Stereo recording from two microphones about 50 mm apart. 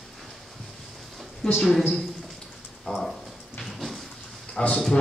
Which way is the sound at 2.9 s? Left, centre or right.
Centre.